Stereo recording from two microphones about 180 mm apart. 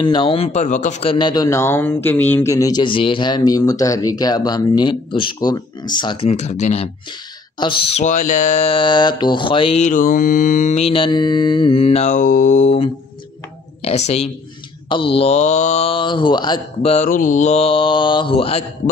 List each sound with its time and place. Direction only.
0.0 s speech: 25° left (ahead or behind); by 1.1 s 40° left (ahead or behind)
1.1 s speech: 25° left (ahead or behind)
6.3 s speech: 40° left (ahead or behind)
7.5 s speech: 25° left (ahead or behind)